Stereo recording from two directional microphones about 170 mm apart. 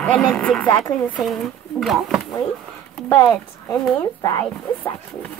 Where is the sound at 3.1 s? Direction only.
10° left (ahead or behind).